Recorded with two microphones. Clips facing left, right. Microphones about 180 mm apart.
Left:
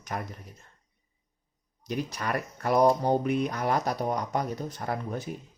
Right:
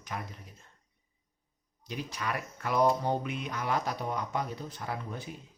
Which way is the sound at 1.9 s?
45° left (ahead or behind).